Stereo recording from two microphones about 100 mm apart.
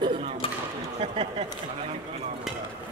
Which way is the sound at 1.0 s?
70° right (ahead or behind).